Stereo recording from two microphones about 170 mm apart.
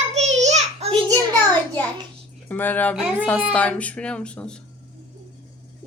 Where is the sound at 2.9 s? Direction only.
5° right (ahead or behind).